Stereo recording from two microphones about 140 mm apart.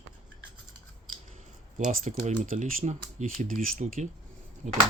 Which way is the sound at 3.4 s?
70° right (ahead or behind).